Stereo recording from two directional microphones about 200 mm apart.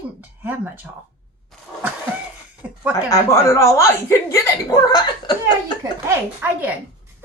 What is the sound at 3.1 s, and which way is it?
Speech, 15° left (ahead or behind).